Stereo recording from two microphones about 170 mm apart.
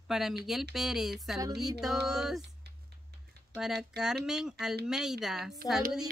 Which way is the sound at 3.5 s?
Centre (ahead or behind).